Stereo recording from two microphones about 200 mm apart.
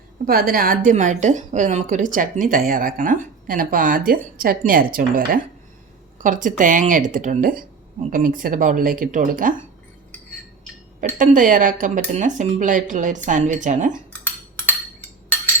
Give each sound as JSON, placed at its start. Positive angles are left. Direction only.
{"t": 0.3, "sound": "a woman's voice", "side_deg": -50}
{"t": 11.2, "sound": "speech", "side_deg": -40}